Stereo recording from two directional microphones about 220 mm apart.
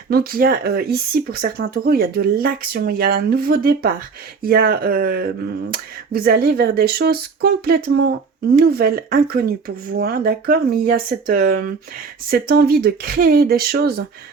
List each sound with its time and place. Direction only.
0.1 s speech: 40° right (ahead or behind)